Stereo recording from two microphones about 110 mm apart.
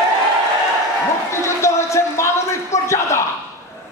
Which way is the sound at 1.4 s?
25° left (ahead or behind).